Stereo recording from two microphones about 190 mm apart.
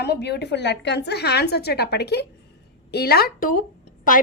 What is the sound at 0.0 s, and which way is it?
A woman's voice, 60° left (ahead or behind).